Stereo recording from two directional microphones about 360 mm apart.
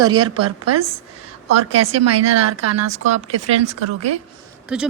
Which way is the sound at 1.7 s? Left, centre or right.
Right.